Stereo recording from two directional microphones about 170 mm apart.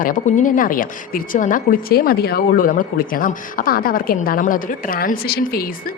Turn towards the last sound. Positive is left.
turn(degrees=65)  # may be behind; listen again after turning